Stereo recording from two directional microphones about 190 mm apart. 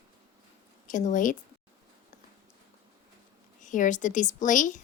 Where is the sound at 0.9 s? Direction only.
40° left (ahead or behind).